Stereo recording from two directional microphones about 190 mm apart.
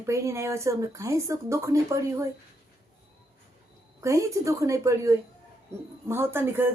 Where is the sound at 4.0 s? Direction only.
15° right (ahead or behind).